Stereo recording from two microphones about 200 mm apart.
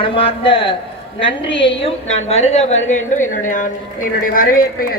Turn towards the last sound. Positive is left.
turn(degrees=45)  # may be behind; listen again after turning